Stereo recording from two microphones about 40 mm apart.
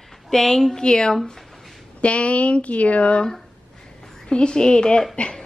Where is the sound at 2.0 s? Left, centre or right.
Left.